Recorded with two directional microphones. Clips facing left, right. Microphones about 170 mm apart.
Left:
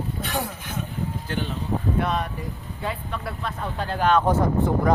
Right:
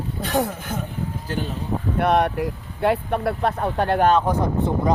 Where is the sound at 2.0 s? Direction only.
70° right (ahead or behind).